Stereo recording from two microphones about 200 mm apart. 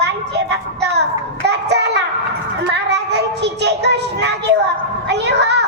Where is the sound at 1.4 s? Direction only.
60° right (ahead or behind).